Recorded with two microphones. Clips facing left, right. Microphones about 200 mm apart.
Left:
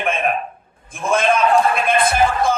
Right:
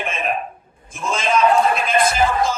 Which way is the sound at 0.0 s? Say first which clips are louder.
Left 3 dB; 55° left (ahead or behind).